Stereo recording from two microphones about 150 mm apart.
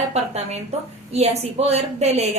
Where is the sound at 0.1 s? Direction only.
45° right (ahead or behind).